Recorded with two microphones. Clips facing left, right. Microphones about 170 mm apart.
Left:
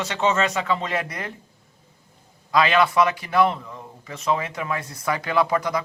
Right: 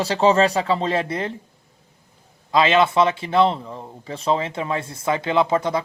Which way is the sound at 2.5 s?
25° right (ahead or behind).